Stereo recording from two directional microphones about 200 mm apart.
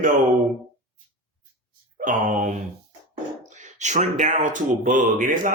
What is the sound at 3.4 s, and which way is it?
Speech, 35° right (ahead or behind).